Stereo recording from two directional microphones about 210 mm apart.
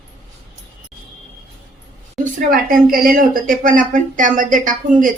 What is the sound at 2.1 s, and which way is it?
A woman's voice, 40° right (ahead or behind).